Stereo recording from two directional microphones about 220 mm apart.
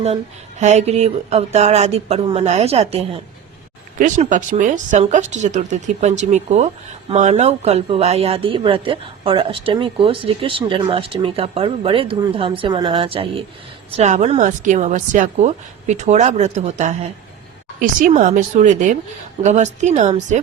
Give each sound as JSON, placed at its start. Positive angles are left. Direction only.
{"t": 0.6, "sound": "speech", "side_deg": -30}